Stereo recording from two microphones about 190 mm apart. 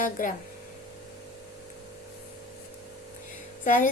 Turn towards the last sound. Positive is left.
turn(degrees=40)  # may be behind; listen again after turning